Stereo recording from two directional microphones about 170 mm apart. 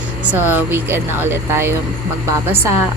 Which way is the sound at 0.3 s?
10° right (ahead or behind).